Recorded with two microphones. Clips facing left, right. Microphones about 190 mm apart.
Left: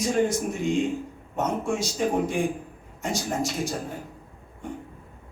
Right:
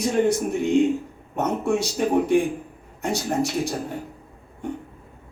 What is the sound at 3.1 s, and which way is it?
Speech, 60° right (ahead or behind).